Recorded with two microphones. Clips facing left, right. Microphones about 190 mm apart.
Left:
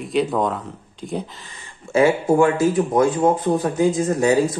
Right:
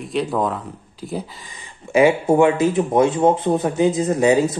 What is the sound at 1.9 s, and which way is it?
A man's voice, 15° right (ahead or behind).